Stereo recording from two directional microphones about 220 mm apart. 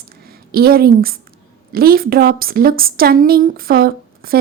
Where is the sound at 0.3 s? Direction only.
45° right (ahead or behind).